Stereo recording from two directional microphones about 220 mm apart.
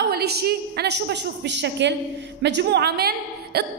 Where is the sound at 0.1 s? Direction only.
45° right (ahead or behind).